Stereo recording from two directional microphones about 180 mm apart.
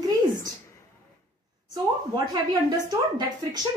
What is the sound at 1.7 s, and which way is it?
Speech, 20° right (ahead or behind).